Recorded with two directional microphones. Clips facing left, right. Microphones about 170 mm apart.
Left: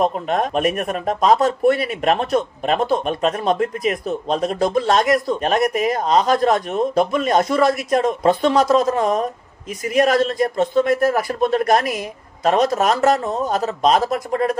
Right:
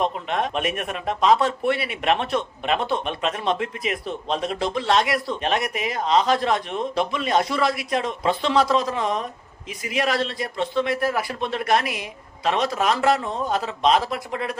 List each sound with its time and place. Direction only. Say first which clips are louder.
0.0 s speech: left 5 dB; 45° left (ahead or behind)